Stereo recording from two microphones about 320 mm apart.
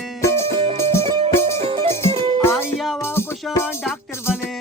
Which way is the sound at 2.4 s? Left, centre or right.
Centre.